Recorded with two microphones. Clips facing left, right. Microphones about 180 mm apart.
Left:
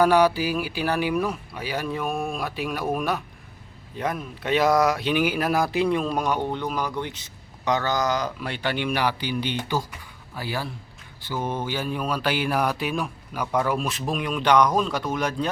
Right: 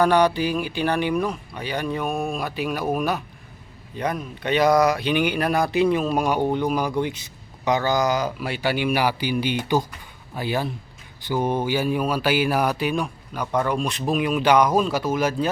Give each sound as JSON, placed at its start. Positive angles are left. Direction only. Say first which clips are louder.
{"t": 0.0, "sound": "a man's voice", "louder": "even", "side_deg": 5}